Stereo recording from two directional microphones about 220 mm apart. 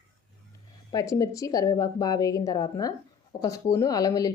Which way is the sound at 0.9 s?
15° left (ahead or behind).